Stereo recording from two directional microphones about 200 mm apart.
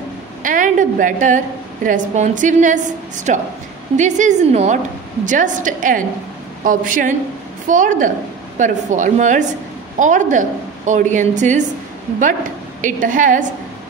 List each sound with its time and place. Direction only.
0.4 s a woman's voice: 40° right (ahead or behind)
12.8 s a woman's voice: 40° right (ahead or behind)